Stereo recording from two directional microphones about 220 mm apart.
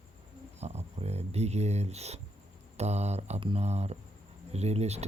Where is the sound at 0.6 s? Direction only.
30° right (ahead or behind).